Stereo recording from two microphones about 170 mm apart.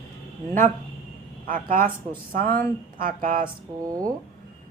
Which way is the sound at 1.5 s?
55° right (ahead or behind).